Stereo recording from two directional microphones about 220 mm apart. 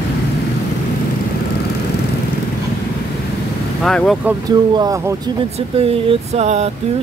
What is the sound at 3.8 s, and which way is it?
Speech, centre (ahead or behind).